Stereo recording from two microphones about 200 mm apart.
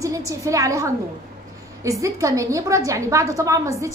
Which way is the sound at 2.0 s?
15° right (ahead or behind).